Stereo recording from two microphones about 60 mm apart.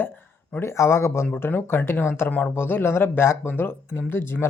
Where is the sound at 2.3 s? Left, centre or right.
Left.